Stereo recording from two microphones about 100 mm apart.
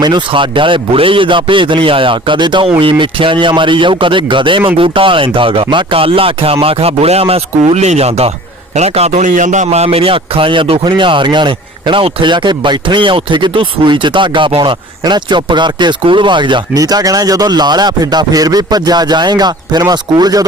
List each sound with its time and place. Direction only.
0.0 s a man's voice: 55° right (ahead or behind)
16.7 s speech: 35° right (ahead or behind)